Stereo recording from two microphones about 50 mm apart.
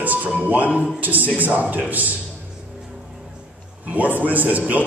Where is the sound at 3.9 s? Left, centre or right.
Right.